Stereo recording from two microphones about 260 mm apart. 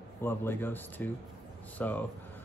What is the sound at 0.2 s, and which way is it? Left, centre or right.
Speech, centre.